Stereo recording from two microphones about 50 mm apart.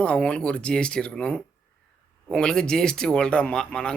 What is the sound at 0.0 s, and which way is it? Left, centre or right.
Speech, left.